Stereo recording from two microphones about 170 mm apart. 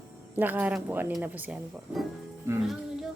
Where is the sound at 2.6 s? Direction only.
Centre (ahead or behind).